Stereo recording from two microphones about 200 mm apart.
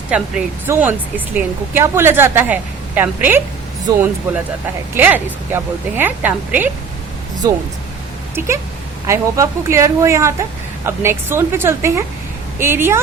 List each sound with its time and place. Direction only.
0.1 s speech: 5° right (ahead or behind)
3.9 s speech: 20° right (ahead or behind)
4.9 s speech: 10° right (ahead or behind)
9.0 s speech: 15° right (ahead or behind)